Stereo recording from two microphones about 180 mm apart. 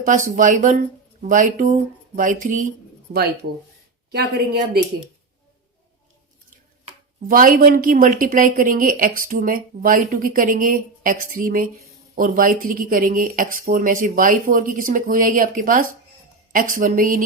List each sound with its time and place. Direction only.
0.0 s a woman's voice: 45° right (ahead or behind)
7.3 s speech: 50° right (ahead or behind)